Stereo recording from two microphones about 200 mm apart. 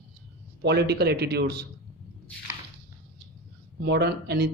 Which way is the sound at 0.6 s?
55° right (ahead or behind).